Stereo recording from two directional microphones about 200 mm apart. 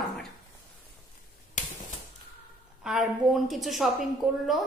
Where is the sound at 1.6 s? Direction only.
40° left (ahead or behind).